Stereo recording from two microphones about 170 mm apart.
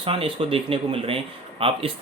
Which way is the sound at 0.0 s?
30° right (ahead or behind).